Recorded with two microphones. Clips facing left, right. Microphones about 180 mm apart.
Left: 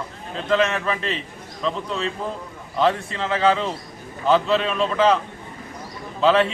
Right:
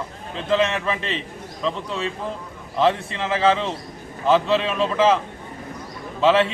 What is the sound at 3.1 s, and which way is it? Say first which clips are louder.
A man's voice: even; 5° right (ahead or behind).